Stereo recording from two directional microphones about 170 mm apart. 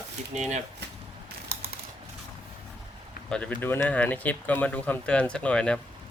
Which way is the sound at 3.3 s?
5° left (ahead or behind).